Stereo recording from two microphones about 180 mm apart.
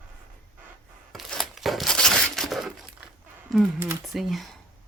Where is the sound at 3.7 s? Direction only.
15° right (ahead or behind).